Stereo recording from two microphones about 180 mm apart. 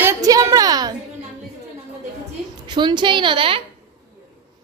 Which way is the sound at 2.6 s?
25° right (ahead or behind).